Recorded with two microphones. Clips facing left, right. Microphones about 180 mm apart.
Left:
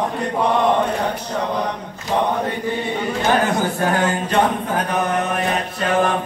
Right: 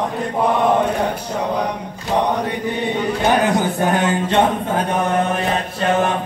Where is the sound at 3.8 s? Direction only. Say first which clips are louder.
Right 2 dB; 20° right (ahead or behind).